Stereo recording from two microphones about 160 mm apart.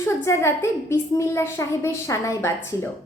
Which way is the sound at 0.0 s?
15° left (ahead or behind).